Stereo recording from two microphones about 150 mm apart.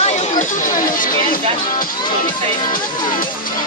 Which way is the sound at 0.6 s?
65° left (ahead or behind).